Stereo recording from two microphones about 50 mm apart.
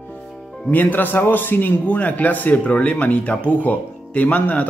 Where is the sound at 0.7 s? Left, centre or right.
Left.